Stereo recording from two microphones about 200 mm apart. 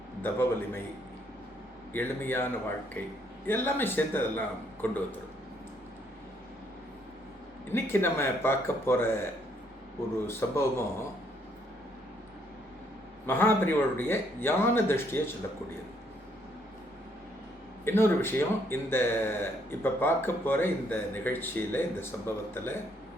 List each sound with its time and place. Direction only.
0.2 s speech: 10° left (ahead or behind)
1.9 s speech: 10° left (ahead or behind)
7.7 s speech: 10° left (ahead or behind)
13.2 s speech: 10° left (ahead or behind)
17.8 s speech: 10° left (ahead or behind)